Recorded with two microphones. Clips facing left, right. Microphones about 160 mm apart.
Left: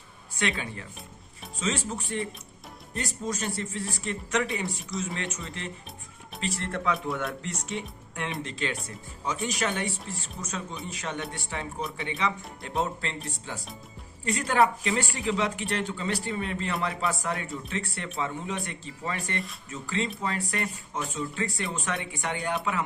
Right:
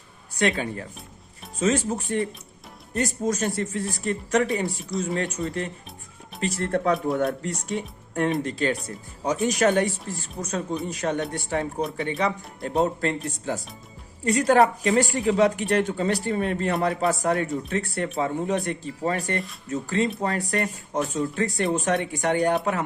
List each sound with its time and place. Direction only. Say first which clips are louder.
0.3 s speech: right 7 dB; 45° right (ahead or behind)